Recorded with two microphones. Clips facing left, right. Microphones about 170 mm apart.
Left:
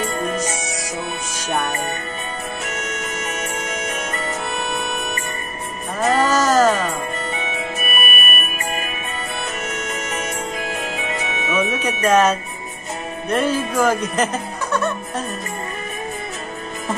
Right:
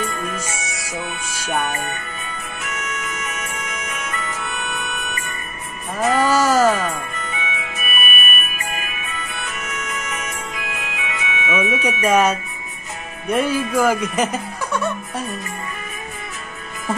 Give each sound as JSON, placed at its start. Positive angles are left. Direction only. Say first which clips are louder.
{"t": 0.0, "sound": "music", "louder": "left 4 dB", "side_deg": 35}
{"t": 1.7, "sound": "speech", "louder": "left 2 dB", "side_deg": 35}
{"t": 2.6, "sound": "music", "louder": "left 2 dB", "side_deg": 35}
{"t": 6.3, "sound": "music", "louder": "even", "side_deg": -10}
{"t": 7.2, "sound": "music", "louder": "left 3 dB", "side_deg": 40}
{"t": 11.7, "sound": "speech", "louder": "even", "side_deg": -10}
{"t": 13.3, "sound": "music", "louder": "right 1 dB", "side_deg": -10}